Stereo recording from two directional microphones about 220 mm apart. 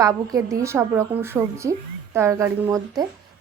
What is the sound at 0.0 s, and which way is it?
A woman's voice, 15° right (ahead or behind).